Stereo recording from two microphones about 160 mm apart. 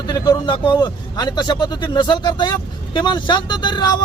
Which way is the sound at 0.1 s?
25° left (ahead or behind).